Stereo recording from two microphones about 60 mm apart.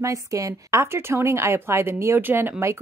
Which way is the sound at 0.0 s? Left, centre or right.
Right.